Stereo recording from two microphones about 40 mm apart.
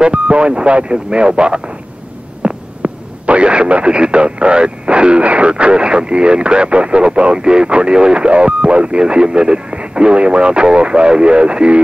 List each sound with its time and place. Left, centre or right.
0.0 s speech: right